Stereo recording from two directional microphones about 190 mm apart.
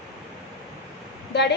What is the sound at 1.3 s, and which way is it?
Speech, 60° left (ahead or behind).